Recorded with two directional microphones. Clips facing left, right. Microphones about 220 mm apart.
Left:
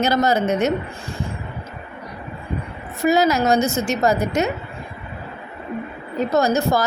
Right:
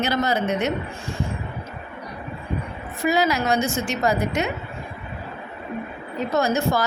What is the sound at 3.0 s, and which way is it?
A woman's voice, 45° left (ahead or behind).